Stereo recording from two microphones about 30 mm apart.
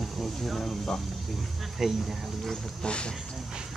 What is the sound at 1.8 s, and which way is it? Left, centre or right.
Speech, centre.